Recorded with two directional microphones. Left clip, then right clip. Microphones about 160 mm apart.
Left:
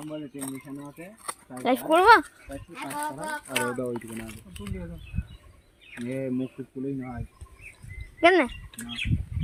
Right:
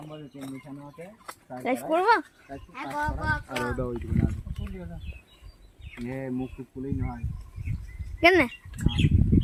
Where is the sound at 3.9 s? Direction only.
90° left.